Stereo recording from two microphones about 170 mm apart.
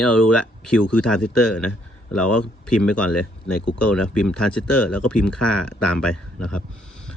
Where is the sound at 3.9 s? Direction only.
5° left (ahead or behind).